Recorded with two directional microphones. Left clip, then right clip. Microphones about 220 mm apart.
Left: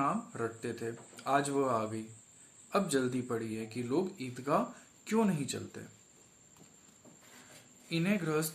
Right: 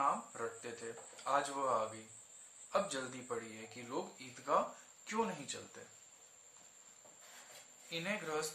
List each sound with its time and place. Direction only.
0.0 s a sound: 45° left (ahead or behind)
2.7 s speech: 45° left (ahead or behind)
7.9 s speech: 45° left (ahead or behind)